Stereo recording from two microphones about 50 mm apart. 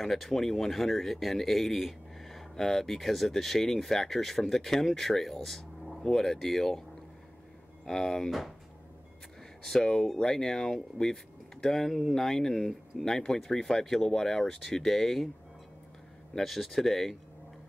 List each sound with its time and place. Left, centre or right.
0.0 s speech: centre
7.8 s speech: centre
8.3 s speech: centre
9.6 s speech: centre
16.3 s speech: centre